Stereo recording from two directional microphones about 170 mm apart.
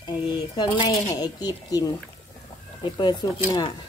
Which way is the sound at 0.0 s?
25° left (ahead or behind).